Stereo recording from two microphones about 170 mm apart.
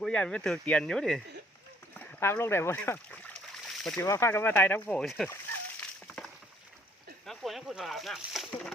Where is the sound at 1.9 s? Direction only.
10° left (ahead or behind).